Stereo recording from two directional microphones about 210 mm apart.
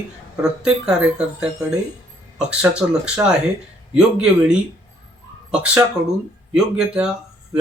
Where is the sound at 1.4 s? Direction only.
5° right (ahead or behind).